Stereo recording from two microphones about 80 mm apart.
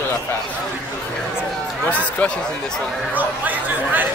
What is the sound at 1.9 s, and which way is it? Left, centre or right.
Speech, centre.